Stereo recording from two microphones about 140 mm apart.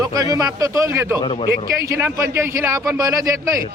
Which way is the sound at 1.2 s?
40° left (ahead or behind).